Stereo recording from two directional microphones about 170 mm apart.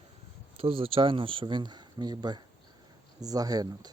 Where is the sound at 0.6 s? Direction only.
35° right (ahead or behind).